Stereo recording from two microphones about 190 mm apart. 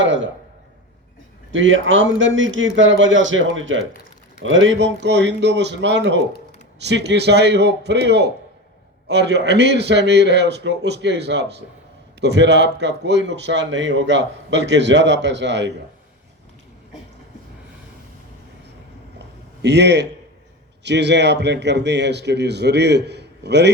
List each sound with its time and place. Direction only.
0.0 s a sound: 80° right
1.5 s a man's voice: 90° right; by 15.7 s 70° right (ahead or behind)
19.6 s a man's voice: 60° right (ahead or behind)